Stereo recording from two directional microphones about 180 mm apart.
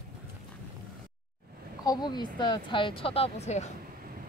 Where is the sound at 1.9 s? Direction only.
25° left (ahead or behind); by 3.7 s 40° left (ahead or behind).